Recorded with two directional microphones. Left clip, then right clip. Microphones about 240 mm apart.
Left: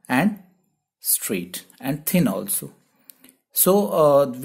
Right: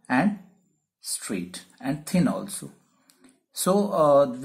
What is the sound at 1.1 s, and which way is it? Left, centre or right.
Speech, left.